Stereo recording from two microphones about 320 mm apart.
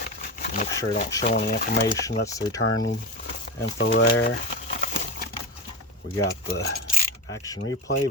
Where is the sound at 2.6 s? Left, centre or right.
Left.